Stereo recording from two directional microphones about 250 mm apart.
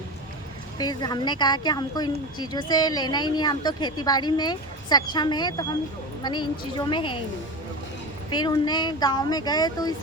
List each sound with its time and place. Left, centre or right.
0.8 s a woman's voice: centre
8.3 s speech: centre